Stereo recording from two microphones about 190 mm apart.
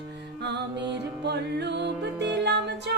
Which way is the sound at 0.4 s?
60° right (ahead or behind).